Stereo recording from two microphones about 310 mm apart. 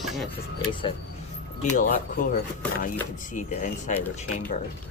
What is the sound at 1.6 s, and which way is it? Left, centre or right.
Speech, left.